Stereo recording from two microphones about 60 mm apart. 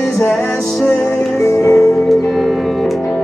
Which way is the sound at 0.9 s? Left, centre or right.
Left.